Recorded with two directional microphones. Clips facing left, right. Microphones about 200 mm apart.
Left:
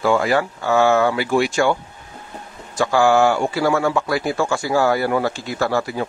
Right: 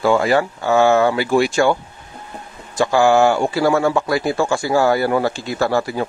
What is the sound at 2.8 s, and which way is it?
Speech, 25° right (ahead or behind).